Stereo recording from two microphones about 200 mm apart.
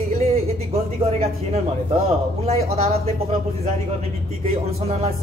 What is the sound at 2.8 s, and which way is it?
Speech, 30° right (ahead or behind).